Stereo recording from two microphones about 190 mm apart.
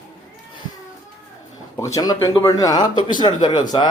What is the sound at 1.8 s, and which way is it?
A man's voice, 20° left (ahead or behind).